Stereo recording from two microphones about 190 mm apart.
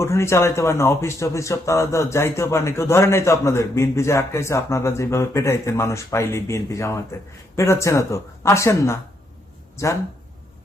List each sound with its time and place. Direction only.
0.0 s speech: 15° left (ahead or behind)